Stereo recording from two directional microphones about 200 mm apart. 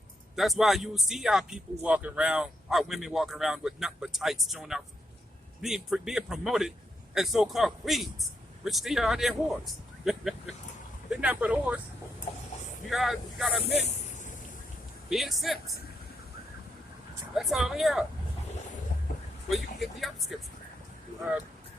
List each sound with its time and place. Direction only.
0.3 s a man's voice: centre (ahead or behind)
12.9 s a man's voice: centre (ahead or behind)
13.8 s vehicle: 35° left (ahead or behind)
15.1 s a man's voice: centre (ahead or behind)
17.3 s a man's voice: centre (ahead or behind)
19.5 s a man's voice: centre (ahead or behind)